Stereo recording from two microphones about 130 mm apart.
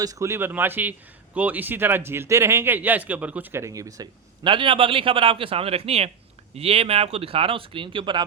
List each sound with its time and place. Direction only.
0.0 s a man's voice: 25° right (ahead or behind)